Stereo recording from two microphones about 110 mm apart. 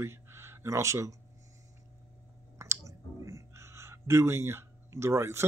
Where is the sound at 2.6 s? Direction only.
30° right (ahead or behind).